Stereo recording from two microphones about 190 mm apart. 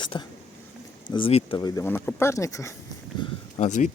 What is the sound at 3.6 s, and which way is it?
Speech, 40° left (ahead or behind).